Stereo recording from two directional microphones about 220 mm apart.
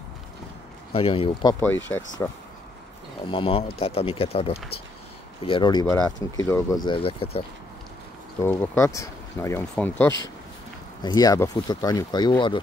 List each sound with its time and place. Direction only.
0.9 s speech: 25° left (ahead or behind)
3.3 s speech: 25° left (ahead or behind)
8.4 s speech: 10° left (ahead or behind)